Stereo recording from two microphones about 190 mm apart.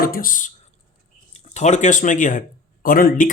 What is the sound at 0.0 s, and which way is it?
Speech, 50° left (ahead or behind).